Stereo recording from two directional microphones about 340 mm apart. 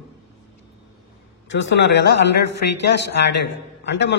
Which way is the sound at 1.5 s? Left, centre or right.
Left.